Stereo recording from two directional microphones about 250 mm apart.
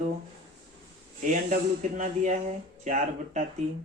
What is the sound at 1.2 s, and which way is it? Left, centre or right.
Speech, right.